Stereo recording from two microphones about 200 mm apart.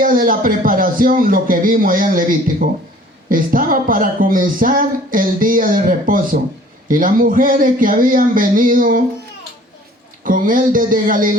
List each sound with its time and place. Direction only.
0.0 s a man's voice: 45° right (ahead or behind)
10.2 s speech: 45° right (ahead or behind)